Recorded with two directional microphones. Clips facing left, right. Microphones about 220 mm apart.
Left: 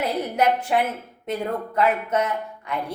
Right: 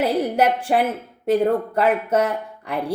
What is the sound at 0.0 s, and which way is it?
A woman's voice, 30° right (ahead or behind).